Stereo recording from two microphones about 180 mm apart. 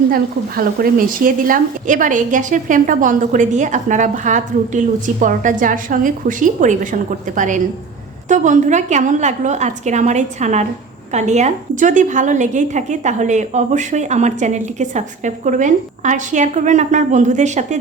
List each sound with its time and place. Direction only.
0.1 s a woman's voice: 55° right (ahead or behind)